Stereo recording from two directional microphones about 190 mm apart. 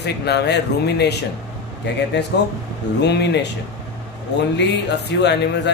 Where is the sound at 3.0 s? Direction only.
65° left (ahead or behind).